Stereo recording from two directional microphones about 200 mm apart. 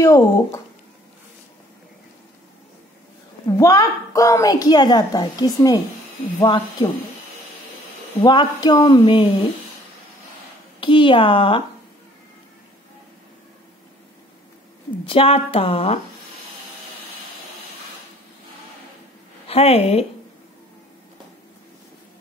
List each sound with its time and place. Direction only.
0.0 s speech: 15° left (ahead or behind)
3.4 s a woman's voice: 15° left (ahead or behind)
8.2 s a woman's voice: 20° left (ahead or behind)
10.8 s a woman's voice: 25° left (ahead or behind)
15.0 s a woman's voice: 30° left (ahead or behind)
19.4 s a woman's voice: 30° left (ahead or behind)